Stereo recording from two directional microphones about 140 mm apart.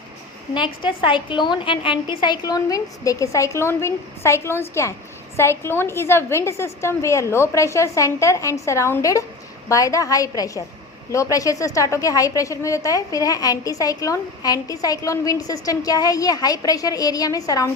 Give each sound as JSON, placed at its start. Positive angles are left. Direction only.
{"t": 0.5, "sound": "a woman's voice", "side_deg": 35}